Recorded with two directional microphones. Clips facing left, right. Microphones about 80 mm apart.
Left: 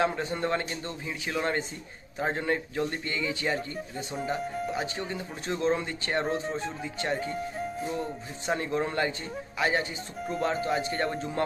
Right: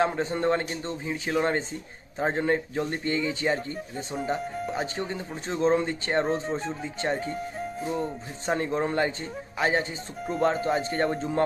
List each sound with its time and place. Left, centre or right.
0.0 s a man's voice: right
4.4 s speech: centre
4.7 s a man's voice: right
7.3 s music: centre
8.4 s speech: right
10.2 s speech: centre
10.4 s a man's voice: right